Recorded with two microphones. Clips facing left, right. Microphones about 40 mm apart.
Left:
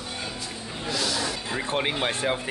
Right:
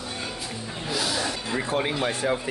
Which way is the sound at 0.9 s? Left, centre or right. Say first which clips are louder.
Even; centre.